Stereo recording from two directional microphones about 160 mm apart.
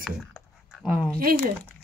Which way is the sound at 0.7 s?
5° right (ahead or behind).